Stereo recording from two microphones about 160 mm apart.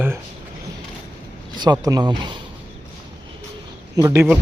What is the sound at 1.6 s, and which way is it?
Speech, 25° right (ahead or behind).